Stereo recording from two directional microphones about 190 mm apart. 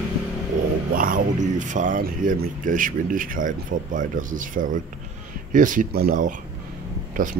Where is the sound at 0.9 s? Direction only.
45° right (ahead or behind).